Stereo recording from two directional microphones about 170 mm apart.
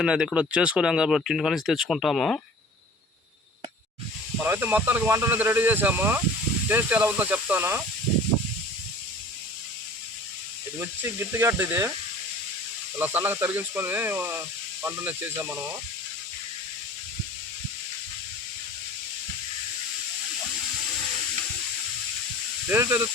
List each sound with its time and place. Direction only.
0.0 s speech: 5° right (ahead or behind)
4.4 s speech: 15° right (ahead or behind)
10.8 s speech: 15° right (ahead or behind)
13.0 s speech: 10° right (ahead or behind)
22.7 s speech: 15° right (ahead or behind)